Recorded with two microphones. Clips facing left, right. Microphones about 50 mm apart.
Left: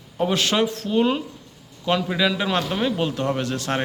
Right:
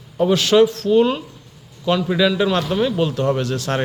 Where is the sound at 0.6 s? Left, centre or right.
Left.